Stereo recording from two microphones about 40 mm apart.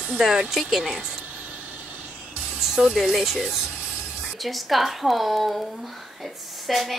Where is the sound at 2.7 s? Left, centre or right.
Centre.